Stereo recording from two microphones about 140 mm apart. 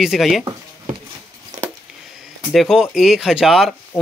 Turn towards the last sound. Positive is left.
turn(degrees=0)  # may be behind; listen again after turning